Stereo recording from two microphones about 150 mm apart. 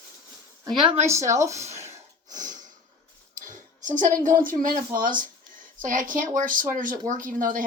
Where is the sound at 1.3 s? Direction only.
20° right (ahead or behind).